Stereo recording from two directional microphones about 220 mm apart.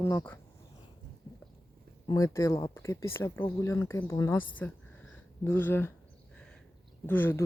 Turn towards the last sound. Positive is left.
turn(degrees=10)  # may be behind; listen again after turning